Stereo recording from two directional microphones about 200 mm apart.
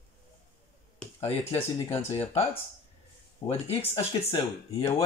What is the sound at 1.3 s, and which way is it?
Speech, 30° left (ahead or behind).